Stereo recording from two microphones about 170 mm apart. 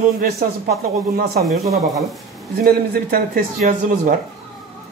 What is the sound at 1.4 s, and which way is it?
Speech, centre (ahead or behind).